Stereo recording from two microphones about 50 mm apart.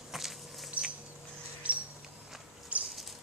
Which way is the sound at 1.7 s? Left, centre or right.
Right.